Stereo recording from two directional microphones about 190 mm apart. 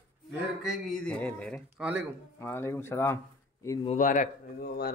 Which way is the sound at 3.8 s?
45° left (ahead or behind).